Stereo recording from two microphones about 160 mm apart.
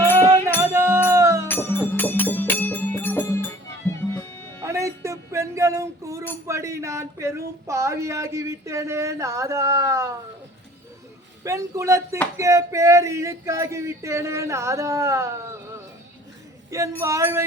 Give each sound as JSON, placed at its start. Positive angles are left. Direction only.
{"t": 0.6, "sound": "music", "side_deg": -15}
{"t": 1.5, "sound": "music", "side_deg": 15}
{"t": 4.6, "sound": "music", "side_deg": -20}
{"t": 6.5, "sound": "speech", "side_deg": -20}
{"t": 11.4, "sound": "speech", "side_deg": -20}
{"t": 16.6, "sound": "speech", "side_deg": -20}